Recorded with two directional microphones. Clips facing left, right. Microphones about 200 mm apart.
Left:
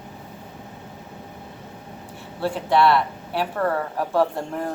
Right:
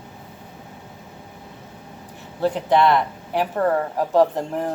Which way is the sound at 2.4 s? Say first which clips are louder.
Right 1 dB; 20° right (ahead or behind).